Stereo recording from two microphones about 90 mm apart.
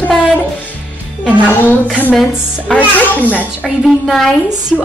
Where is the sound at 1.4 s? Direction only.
20° left (ahead or behind).